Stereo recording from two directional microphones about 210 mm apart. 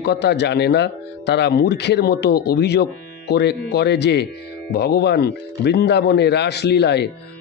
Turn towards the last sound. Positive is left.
turn(degrees=50)  # may be behind; listen again after turning